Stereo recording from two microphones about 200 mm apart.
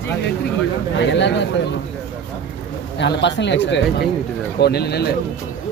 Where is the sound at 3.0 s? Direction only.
60° left (ahead or behind).